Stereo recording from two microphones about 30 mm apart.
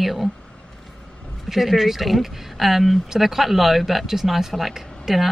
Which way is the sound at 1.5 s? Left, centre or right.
Centre.